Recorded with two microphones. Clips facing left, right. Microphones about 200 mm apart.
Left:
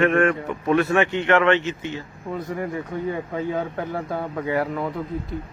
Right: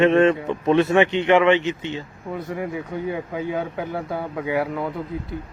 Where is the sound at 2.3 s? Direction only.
Centre (ahead or behind).